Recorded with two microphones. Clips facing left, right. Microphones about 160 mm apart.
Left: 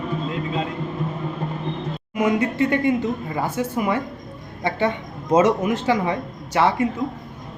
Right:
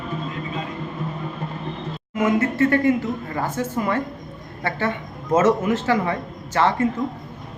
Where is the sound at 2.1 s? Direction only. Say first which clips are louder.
Right 1 dB; 15° left (ahead or behind).